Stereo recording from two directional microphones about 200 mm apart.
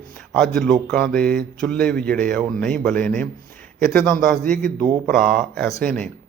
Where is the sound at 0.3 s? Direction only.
5° left (ahead or behind).